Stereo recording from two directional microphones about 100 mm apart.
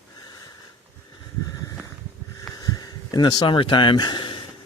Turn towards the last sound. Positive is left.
turn(degrees=50)  # may be behind; listen again after turning